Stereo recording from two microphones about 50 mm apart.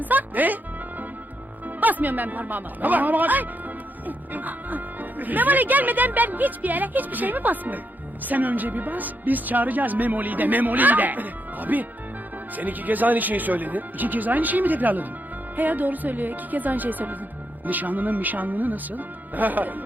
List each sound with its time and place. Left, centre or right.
0.0 s music: right
1.6 s speech: right